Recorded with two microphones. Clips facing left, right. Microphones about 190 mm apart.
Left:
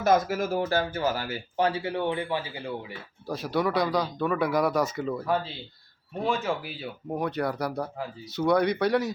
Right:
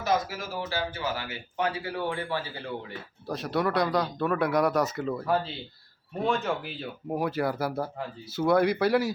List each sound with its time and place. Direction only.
0.0 s speech: 50° left (ahead or behind); by 2.9 s 10° left (ahead or behind)
3.2 s speech: centre (ahead or behind)